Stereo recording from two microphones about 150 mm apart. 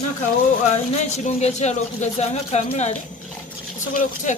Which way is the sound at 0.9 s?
50° left (ahead or behind).